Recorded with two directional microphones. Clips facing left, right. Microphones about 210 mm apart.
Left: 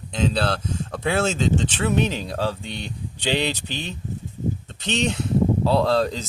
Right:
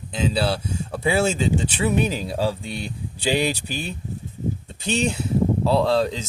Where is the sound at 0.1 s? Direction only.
5° right (ahead or behind).